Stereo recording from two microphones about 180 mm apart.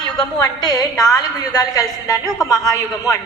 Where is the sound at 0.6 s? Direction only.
20° left (ahead or behind).